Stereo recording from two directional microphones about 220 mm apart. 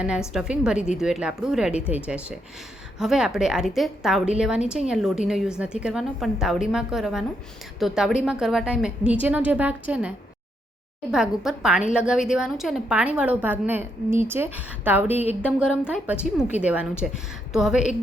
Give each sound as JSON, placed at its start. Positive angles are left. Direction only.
{"t": 0.3, "sound": "a woman's voice", "side_deg": -5}
{"t": 11.1, "sound": "a woman's voice", "side_deg": 0}
{"t": 15.1, "sound": "speech", "side_deg": 30}
{"t": 15.4, "sound": "a woman's voice", "side_deg": -5}